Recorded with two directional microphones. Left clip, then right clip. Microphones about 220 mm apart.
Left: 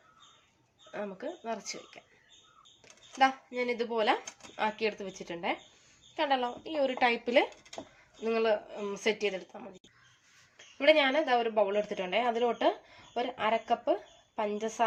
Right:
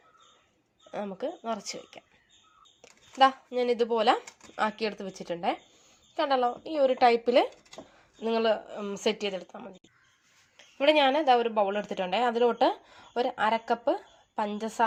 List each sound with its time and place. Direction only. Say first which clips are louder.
0.9 s speech: right 4 dB; 35° right (ahead or behind)
3.2 s a woman's voice: right 5 dB; 35° right (ahead or behind)
10.8 s speech: right 2 dB; 40° right (ahead or behind)